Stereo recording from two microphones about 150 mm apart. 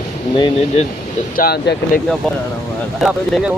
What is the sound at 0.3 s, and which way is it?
Speech, 35° left (ahead or behind).